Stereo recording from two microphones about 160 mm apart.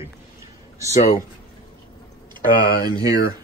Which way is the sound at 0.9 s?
40° left (ahead or behind).